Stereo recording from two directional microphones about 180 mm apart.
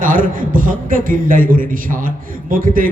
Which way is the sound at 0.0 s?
50° right (ahead or behind).